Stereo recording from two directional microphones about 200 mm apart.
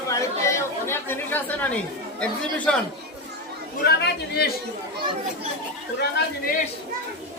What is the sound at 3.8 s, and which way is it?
Speech, 55° left (ahead or behind).